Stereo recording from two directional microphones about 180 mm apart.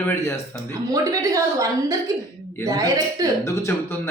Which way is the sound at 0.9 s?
20° right (ahead or behind).